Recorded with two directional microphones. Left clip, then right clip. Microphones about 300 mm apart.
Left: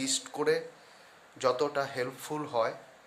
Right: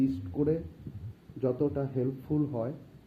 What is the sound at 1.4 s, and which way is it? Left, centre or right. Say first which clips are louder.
Speech: left 2 dB; left.